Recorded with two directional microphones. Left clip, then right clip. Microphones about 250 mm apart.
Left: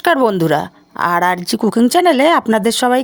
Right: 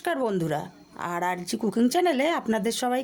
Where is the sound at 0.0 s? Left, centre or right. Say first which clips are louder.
Left 14 dB; left.